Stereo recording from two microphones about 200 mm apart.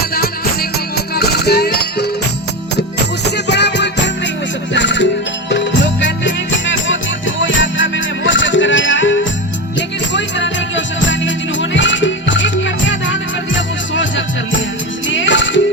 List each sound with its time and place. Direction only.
0.1 s music: 50° left (ahead or behind)
3.2 s music: 60° left (ahead or behind)